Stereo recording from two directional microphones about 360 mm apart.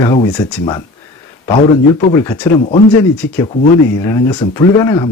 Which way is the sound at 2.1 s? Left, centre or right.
Centre.